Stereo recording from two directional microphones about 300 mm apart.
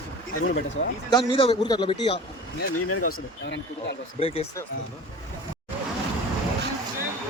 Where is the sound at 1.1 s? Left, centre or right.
Centre.